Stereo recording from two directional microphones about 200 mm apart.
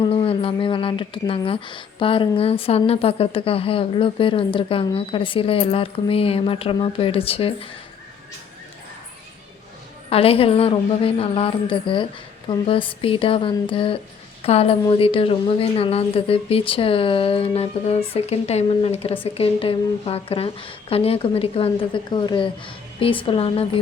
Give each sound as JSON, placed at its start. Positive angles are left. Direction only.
{"t": 0.0, "sound": "speech", "side_deg": 30}
{"t": 10.1, "sound": "speech", "side_deg": 30}